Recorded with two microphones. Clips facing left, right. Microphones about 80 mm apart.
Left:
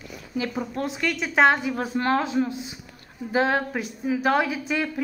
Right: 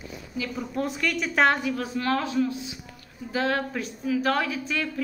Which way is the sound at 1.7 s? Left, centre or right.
Left.